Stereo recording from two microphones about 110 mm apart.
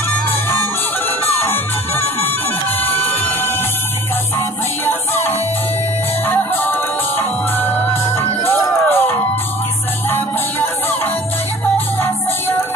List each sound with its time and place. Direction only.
1.4 s music: 20° left (ahead or behind)
4.8 s music: 20° left (ahead or behind)